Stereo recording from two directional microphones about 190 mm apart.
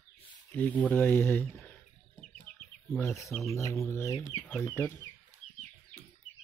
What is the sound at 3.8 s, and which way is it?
Speech, 15° left (ahead or behind).